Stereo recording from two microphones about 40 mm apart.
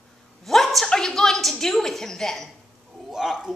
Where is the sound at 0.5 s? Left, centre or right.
Centre.